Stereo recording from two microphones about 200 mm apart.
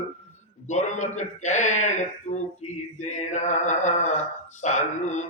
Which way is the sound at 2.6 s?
35° left (ahead or behind).